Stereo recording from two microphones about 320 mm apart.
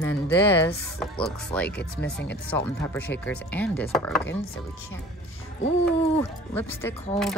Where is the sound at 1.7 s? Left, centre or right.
Left.